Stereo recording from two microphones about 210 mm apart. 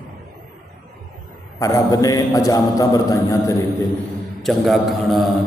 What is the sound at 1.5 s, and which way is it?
A man's voice, 15° left (ahead or behind).